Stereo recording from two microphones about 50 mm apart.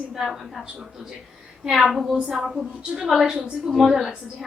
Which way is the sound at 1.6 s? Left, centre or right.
Centre.